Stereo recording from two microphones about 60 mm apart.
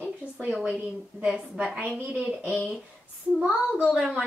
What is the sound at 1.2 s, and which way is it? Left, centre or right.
Speech, centre.